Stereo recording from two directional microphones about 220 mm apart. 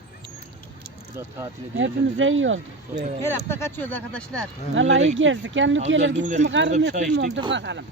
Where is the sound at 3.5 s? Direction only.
10° left (ahead or behind).